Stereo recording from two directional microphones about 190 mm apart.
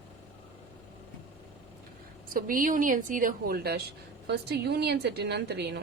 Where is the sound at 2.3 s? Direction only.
45° right (ahead or behind).